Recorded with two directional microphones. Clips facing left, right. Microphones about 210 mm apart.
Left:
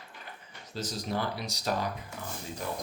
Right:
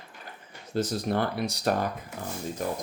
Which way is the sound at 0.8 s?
55° right (ahead or behind).